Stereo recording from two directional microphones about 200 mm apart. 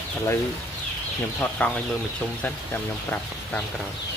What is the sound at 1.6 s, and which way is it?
Speech, 10° left (ahead or behind).